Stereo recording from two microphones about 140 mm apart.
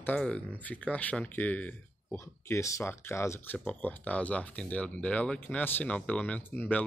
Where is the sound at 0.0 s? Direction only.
10° left (ahead or behind).